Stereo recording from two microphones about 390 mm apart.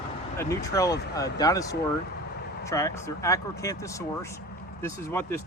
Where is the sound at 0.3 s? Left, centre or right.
Centre.